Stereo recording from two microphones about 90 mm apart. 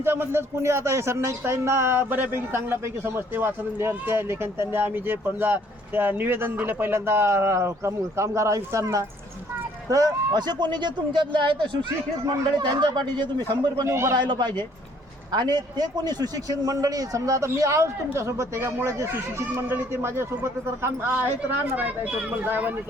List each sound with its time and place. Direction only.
0.0 s speech: 25° right (ahead or behind)
9.9 s a man's voice: 45° right (ahead or behind); by 11.5 s 65° right (ahead or behind)
12.2 s a man's voice: 50° right (ahead or behind)
13.8 s a man's voice: 30° right (ahead or behind)
14.2 s a man's voice: 55° right (ahead or behind); by 20.2 s 25° right (ahead or behind)
21.8 s speech: 15° right (ahead or behind)